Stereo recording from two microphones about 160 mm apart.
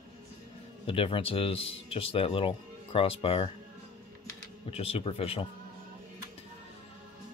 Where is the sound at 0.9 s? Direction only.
35° left (ahead or behind).